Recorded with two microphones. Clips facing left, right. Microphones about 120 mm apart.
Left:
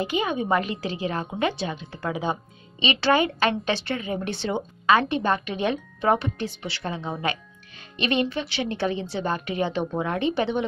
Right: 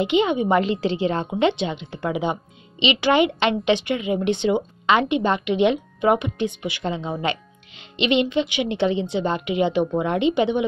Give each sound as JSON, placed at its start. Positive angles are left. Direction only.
{"t": 0.0, "sound": "a woman's voice", "side_deg": -25}